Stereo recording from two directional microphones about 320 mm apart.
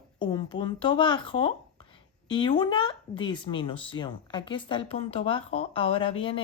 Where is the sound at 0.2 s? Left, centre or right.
Centre.